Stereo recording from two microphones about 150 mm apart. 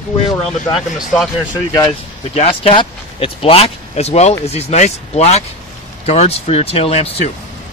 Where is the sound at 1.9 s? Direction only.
40° left (ahead or behind).